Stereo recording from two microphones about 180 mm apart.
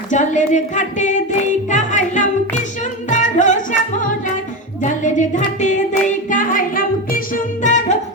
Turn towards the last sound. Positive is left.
turn(degrees=45)  # may be behind; listen again after turning